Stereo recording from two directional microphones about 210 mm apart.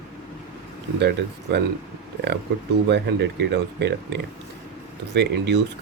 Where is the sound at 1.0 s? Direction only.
55° right (ahead or behind).